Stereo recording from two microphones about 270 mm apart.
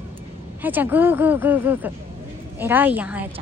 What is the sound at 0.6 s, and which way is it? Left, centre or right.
Speech, centre.